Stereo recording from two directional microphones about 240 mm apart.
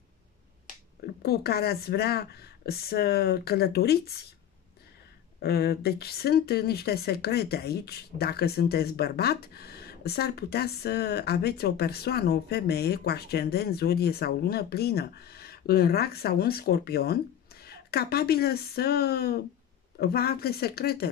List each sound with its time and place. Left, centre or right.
1.2 s speech: left
5.4 s speech: left